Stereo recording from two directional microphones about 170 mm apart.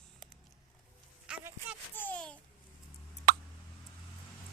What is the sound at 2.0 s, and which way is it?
Babbling, 5° left (ahead or behind).